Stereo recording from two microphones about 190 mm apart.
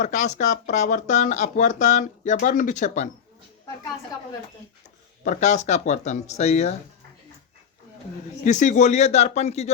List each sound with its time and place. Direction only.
0.0 s speech: 40° left (ahead or behind)
5.2 s speech: 40° left (ahead or behind)
8.4 s speech: 40° left (ahead or behind)